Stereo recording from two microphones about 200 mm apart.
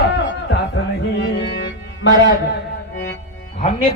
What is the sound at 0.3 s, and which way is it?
Music, 60° left (ahead or behind).